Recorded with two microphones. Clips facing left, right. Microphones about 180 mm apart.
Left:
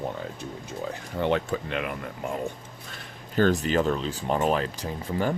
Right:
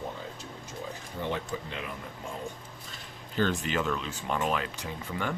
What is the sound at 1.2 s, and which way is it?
Speech, 70° left (ahead or behind).